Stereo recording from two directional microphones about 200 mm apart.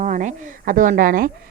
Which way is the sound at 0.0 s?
40° right (ahead or behind).